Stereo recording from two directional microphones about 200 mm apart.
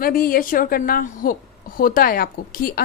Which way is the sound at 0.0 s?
45° left (ahead or behind).